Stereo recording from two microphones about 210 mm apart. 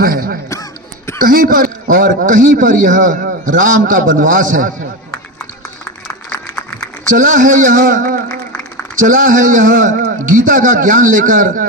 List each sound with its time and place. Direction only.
0.0 s a man's voice: 45° right (ahead or behind)
6.3 s a sound: 15° left (ahead or behind)
7.2 s a man's voice: 40° right (ahead or behind)